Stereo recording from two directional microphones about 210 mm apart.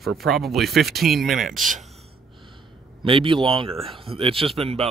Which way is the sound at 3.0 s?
25° right (ahead or behind).